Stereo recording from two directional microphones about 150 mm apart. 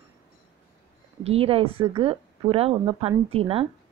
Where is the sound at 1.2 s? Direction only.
40° right (ahead or behind).